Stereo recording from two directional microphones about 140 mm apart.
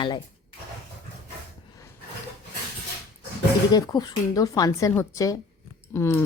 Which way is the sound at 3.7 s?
30° left (ahead or behind).